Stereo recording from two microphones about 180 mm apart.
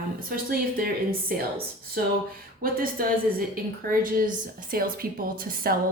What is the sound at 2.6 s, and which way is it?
A woman's voice, 55° right (ahead or behind).